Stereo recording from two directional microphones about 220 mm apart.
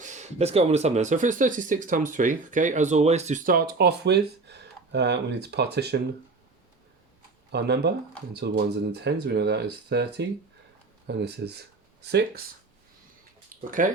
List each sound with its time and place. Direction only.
0.0 s speech: 35° right (ahead or behind); by 6.0 s 50° right (ahead or behind)
7.5 s speech: 50° right (ahead or behind)
13.7 s speech: 35° right (ahead or behind)